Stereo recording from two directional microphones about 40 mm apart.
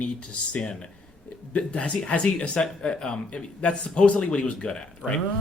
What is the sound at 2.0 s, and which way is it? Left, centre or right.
Speech, centre.